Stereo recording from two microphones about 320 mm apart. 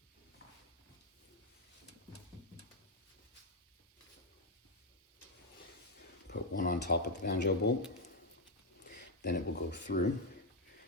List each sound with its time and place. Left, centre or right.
6.2 s speech: left
8.9 s speech: left